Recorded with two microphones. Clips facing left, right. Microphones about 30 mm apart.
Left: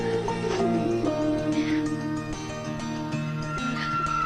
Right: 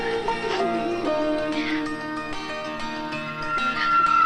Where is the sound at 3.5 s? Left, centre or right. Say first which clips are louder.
Right 8 dB; right.